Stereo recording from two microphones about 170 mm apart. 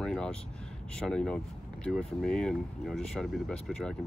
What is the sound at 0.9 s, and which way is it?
Speech, 5° left (ahead or behind).